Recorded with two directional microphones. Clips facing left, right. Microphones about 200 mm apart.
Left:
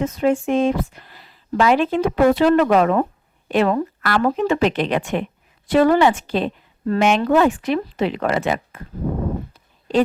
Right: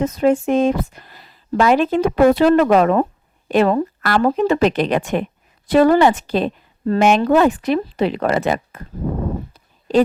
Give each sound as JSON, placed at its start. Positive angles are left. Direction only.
{"t": 0.0, "sound": "speech", "side_deg": -40}